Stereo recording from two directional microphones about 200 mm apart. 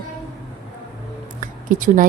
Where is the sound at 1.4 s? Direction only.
40° right (ahead or behind).